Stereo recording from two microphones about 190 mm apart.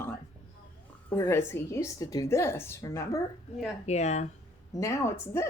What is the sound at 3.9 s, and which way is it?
Speech, 35° left (ahead or behind).